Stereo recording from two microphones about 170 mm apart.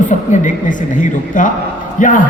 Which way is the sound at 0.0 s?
50° left (ahead or behind).